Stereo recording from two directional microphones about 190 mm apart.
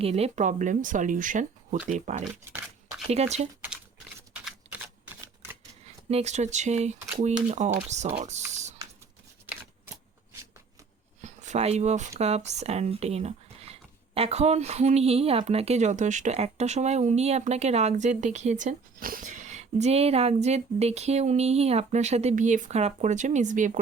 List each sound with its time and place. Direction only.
0.0 s speech: 35° right (ahead or behind)
5.8 s speech: 35° right (ahead or behind)
9.5 s typewriter: 10° right (ahead or behind)
11.2 s a sound: 40° right (ahead or behind)
12.2 s speech: 35° right (ahead or behind)